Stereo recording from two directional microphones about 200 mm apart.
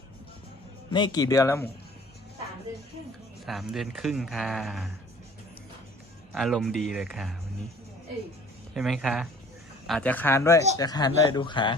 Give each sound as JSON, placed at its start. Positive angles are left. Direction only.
{"t": 0.9, "sound": "speech", "side_deg": 25}
{"t": 3.4, "sound": "speech", "side_deg": 0}
{"t": 6.3, "sound": "speech", "side_deg": 0}
{"t": 8.7, "sound": "speech", "side_deg": 0}